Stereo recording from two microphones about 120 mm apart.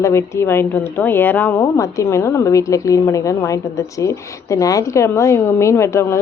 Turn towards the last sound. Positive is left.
turn(degrees=25)  # may be behind; listen again after turning